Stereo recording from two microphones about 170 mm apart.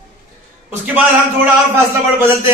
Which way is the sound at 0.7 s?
10° right (ahead or behind).